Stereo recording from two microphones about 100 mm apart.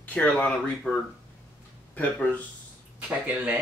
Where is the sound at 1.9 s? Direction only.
15° left (ahead or behind).